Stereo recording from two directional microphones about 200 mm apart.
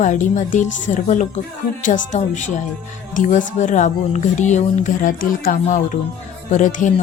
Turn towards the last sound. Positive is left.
turn(degrees=40)  # may be behind; listen again after turning